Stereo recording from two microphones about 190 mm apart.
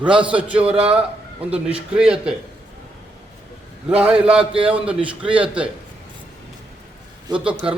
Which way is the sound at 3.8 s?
5° right (ahead or behind).